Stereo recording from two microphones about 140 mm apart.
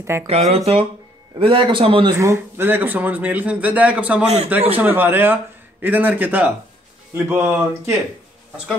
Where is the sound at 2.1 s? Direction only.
15° right (ahead or behind).